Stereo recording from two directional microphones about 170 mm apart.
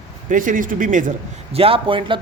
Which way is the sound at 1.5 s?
35° right (ahead or behind).